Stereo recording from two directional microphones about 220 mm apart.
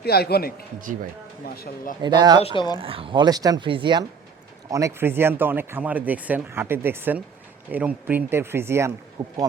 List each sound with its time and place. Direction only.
0.0 s speech: 45° left (ahead or behind)
2.0 s speech: 20° right (ahead or behind)
2.4 s speech: 25° left (ahead or behind)
2.7 s speech: 25° right (ahead or behind)